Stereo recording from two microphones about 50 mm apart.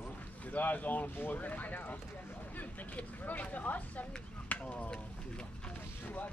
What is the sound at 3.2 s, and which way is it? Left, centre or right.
Speech, left.